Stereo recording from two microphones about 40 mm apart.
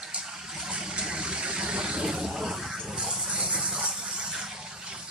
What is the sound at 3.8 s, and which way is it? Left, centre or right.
Vehicle, right.